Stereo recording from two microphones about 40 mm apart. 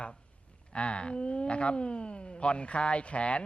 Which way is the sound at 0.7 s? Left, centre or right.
Left.